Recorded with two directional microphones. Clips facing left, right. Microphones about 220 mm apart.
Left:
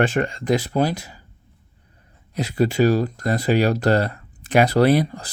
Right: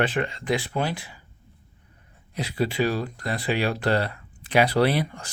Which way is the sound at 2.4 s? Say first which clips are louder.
Left 6 dB; 45° left (ahead or behind).